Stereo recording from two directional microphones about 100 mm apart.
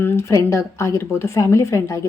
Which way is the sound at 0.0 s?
25° left (ahead or behind).